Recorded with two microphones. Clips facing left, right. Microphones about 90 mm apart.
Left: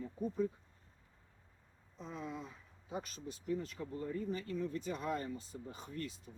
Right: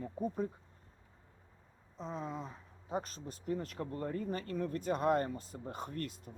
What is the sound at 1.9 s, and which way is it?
Speech, 35° right (ahead or behind).